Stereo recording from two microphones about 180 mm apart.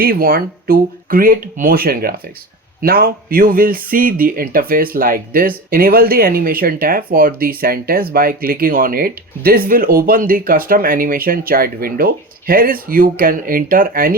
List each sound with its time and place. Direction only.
0.0 s a man's voice: 60° right (ahead or behind)